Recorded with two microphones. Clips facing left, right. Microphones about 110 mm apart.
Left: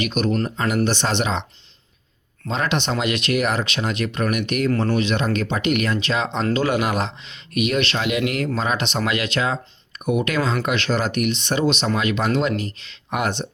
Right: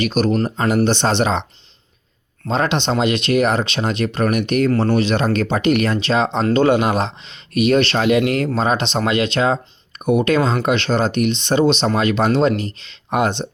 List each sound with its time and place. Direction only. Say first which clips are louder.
0.0 s speech: right 4 dB; 35° right (ahead or behind)
2.5 s speech: right 4 dB; 30° right (ahead or behind)